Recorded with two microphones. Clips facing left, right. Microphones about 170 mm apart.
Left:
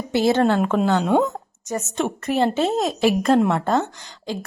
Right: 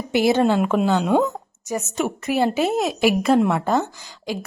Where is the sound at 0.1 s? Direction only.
15° right (ahead or behind).